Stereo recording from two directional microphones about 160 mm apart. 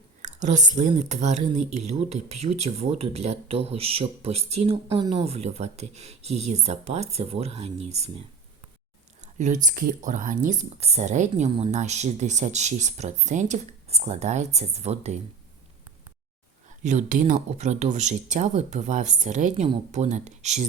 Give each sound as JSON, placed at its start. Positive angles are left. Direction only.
{"t": 0.2, "sound": "speech", "side_deg": -50}
{"t": 9.2, "sound": "speech", "side_deg": -45}
{"t": 16.8, "sound": "speech", "side_deg": -50}